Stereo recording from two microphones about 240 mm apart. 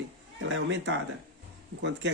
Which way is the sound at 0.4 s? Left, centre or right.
Right.